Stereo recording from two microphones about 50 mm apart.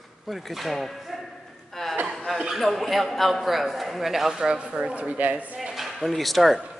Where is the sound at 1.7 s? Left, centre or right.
Centre.